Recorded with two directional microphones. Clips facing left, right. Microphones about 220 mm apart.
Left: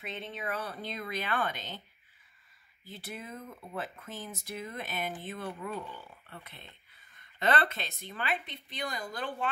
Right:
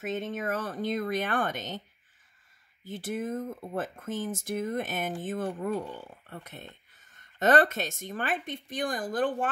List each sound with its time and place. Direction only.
0.0 s speech: 45° right (ahead or behind)
2.8 s speech: 50° right (ahead or behind)